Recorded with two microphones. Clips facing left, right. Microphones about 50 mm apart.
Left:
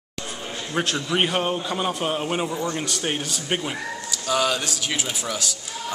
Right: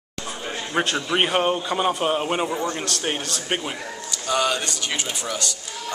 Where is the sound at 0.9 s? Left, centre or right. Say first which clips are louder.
Right 1 dB; centre.